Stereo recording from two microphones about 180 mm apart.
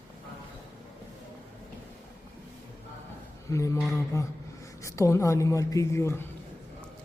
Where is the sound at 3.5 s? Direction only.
15° left (ahead or behind).